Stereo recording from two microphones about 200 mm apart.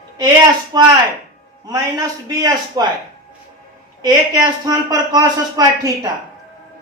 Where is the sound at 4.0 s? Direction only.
20° right (ahead or behind).